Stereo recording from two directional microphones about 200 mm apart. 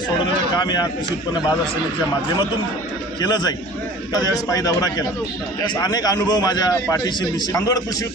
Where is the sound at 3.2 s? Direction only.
20° left (ahead or behind).